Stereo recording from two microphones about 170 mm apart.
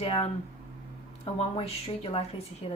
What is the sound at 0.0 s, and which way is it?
Speech, 35° left (ahead or behind).